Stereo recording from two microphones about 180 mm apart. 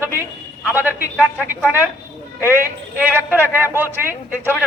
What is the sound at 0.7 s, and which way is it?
Speech, 10° right (ahead or behind).